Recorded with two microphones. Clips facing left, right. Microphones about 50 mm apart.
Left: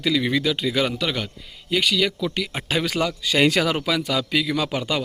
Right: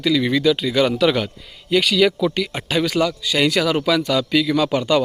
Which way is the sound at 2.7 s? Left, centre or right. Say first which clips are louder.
Right 4 dB; centre.